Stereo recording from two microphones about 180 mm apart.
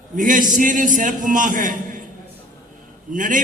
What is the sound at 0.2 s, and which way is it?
A man's voice, 45° right (ahead or behind).